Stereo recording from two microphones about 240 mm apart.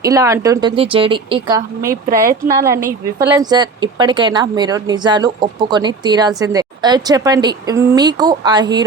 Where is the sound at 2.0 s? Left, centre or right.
Right.